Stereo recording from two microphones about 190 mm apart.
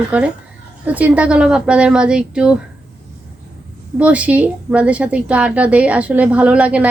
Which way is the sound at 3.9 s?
5° right (ahead or behind).